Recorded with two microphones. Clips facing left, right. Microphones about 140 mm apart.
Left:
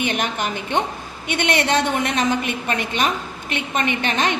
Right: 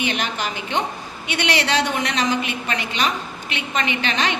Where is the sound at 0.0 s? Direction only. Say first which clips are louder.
Left 2 dB; 50° left (ahead or behind).